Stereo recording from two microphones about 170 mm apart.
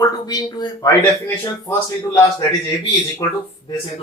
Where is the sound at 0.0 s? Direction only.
25° left (ahead or behind).